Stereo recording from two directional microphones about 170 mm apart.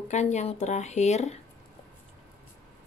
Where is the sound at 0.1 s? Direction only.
45° left (ahead or behind).